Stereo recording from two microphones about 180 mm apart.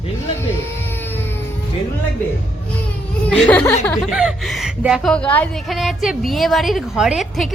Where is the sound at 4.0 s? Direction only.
5° right (ahead or behind).